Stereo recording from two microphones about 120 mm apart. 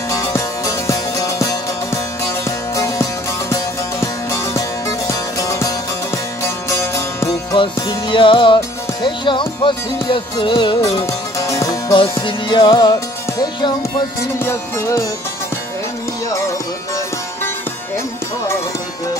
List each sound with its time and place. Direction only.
0.1 s music: 25° left (ahead or behind)
7.5 s music: 45° left (ahead or behind)
10.8 s music: 30° left (ahead or behind)
11.9 s music: 45° left (ahead or behind)
14.4 s music: 25° left (ahead or behind)